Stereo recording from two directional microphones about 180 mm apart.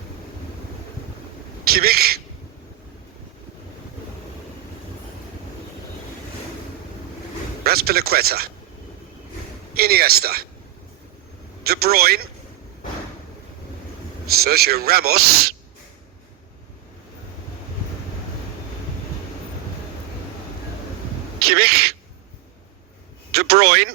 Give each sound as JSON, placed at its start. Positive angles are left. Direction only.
{"t": 1.6, "sound": "speech", "side_deg": -60}
{"t": 7.6, "sound": "speech", "side_deg": -60}
{"t": 9.7, "sound": "a man's voice", "side_deg": -60}
{"t": 11.6, "sound": "a man's voice", "side_deg": -60}
{"t": 14.3, "sound": "a man's voice", "side_deg": -60}
{"t": 21.4, "sound": "a sound", "side_deg": -60}
{"t": 23.3, "sound": "a sound", "side_deg": -60}